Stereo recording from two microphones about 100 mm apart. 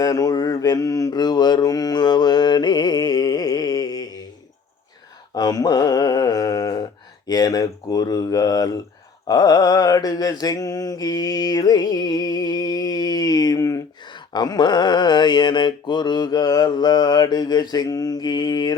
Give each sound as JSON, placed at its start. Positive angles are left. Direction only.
{"t": 0.0, "sound": "mantra", "side_deg": 35}
{"t": 5.3, "sound": "a sound", "side_deg": 40}
{"t": 7.3, "sound": "speech", "side_deg": 40}
{"t": 9.2, "sound": "mantra", "side_deg": 40}
{"t": 14.3, "sound": "mantra", "side_deg": 45}